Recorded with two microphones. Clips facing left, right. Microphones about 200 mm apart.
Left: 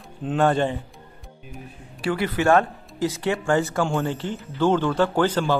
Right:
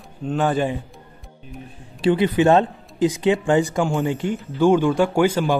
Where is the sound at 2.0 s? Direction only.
20° right (ahead or behind).